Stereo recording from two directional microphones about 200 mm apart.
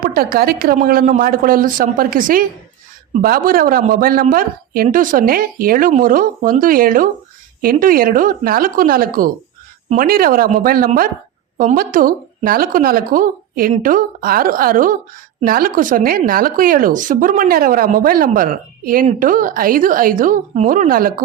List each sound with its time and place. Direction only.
0.0 s a woman's voice: 45° right (ahead or behind)